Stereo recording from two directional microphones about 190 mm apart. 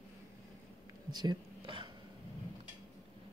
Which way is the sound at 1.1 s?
20° right (ahead or behind).